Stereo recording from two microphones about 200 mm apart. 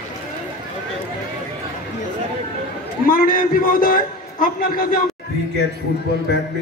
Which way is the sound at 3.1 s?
45° left (ahead or behind).